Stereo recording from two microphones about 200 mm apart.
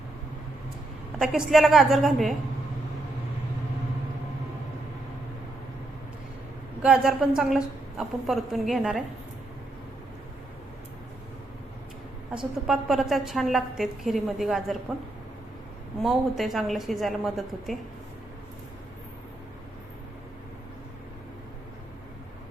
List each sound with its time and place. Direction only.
1.2 s a woman's voice: centre (ahead or behind)
6.8 s a woman's voice: 5° right (ahead or behind)
12.6 s a woman's voice: centre (ahead or behind)
16.0 s a woman's voice: centre (ahead or behind)